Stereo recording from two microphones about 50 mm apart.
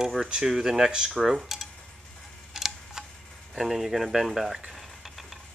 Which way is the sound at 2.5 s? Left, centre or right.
Centre.